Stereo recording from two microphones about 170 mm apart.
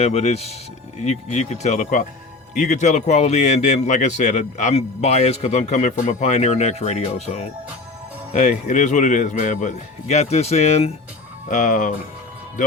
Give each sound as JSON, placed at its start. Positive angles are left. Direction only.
{"t": 0.0, "sound": "speech", "side_deg": 40}